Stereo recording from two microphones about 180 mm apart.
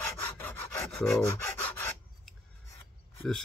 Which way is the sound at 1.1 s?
15° left (ahead or behind).